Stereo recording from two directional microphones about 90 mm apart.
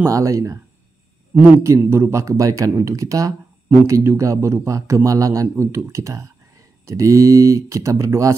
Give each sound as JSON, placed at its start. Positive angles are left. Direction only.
{"t": 0.0, "sound": "speech", "side_deg": -35}
{"t": 1.6, "sound": "speech", "side_deg": -30}